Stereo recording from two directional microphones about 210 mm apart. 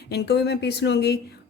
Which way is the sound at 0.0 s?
50° left (ahead or behind).